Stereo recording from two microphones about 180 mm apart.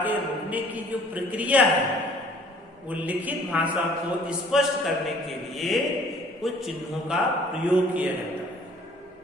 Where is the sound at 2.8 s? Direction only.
10° right (ahead or behind).